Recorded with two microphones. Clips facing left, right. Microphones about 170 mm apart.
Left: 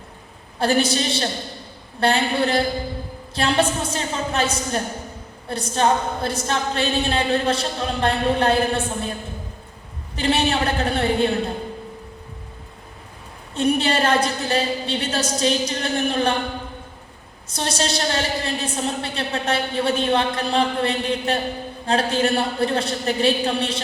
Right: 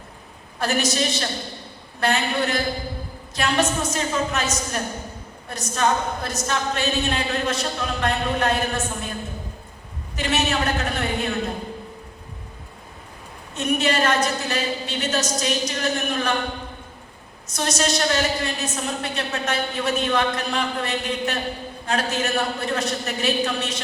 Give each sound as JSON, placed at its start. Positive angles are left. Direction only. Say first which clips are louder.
{"t": 0.6, "sound": "a woman's voice", "louder": "left 3 dB", "side_deg": 30}
{"t": 10.2, "sound": "a woman's voice", "louder": "left 3 dB", "side_deg": 30}
{"t": 13.5, "sound": "a woman's voice", "louder": "left 3 dB", "side_deg": 30}
{"t": 17.5, "sound": "a woman's voice", "louder": "right 1 dB", "side_deg": 30}